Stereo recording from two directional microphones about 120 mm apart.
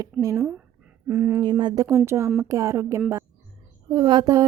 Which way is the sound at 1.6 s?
40° right (ahead or behind).